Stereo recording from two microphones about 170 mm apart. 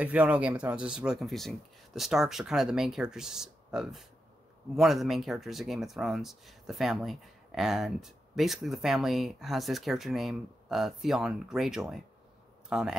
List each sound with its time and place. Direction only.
0.0 s a man's voice: 10° right (ahead or behind)